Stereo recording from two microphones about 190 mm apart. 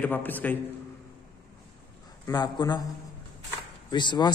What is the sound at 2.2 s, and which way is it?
Speech, 20° left (ahead or behind).